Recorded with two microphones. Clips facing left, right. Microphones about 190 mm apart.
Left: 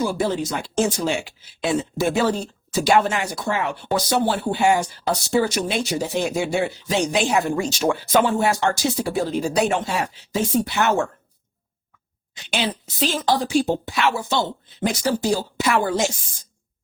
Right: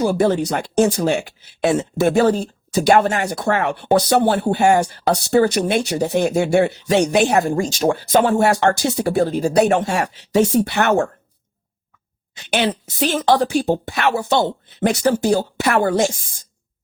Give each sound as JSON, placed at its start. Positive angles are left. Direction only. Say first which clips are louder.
{"t": 0.0, "sound": "speech", "louder": "right 6 dB", "side_deg": -50}
{"t": 0.4, "sound": "speech", "louder": "right 5 dB", "side_deg": -65}
{"t": 7.4, "sound": "speech", "louder": "right 3 dB", "side_deg": -45}
{"t": 8.4, "sound": "speech", "louder": "right 4 dB", "side_deg": -65}
{"t": 12.5, "sound": "a woman's voice", "louder": "right 5 dB", "side_deg": -60}